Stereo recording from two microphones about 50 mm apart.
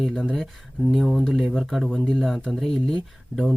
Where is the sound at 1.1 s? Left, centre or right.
Centre.